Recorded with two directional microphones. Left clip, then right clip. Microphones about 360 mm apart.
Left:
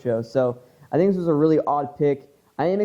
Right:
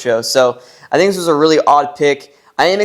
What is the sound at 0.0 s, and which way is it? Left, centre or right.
A woman's voice, centre.